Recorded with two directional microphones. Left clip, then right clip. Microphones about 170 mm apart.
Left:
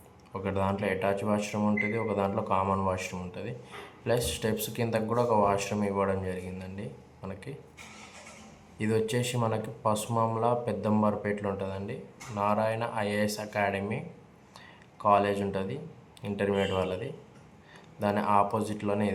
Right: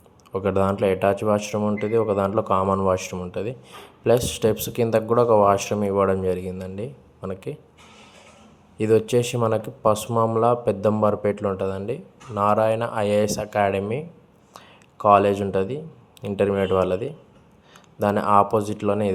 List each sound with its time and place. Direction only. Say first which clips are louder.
0.3 s speech: right 9 dB; 40° right (ahead or behind)
8.8 s speech: right 10 dB; 40° right (ahead or behind)
14.5 s a sound: right 7 dB; 45° right (ahead or behind)
16.2 s speech: right 7 dB; 40° right (ahead or behind)